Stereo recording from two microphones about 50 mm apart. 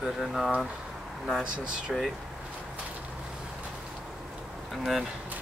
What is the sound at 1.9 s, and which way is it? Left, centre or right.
Speech, centre.